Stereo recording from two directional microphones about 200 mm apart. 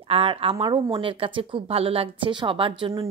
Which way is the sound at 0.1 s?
25° right (ahead or behind).